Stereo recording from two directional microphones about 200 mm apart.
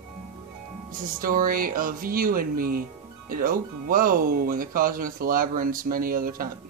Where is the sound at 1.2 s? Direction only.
45° right (ahead or behind).